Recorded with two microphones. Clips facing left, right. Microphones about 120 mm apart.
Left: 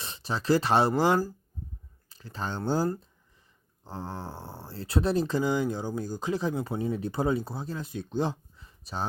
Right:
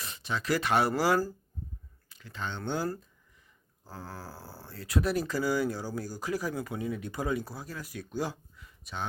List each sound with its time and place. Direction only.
0.0 s speech: 30° left (ahead or behind)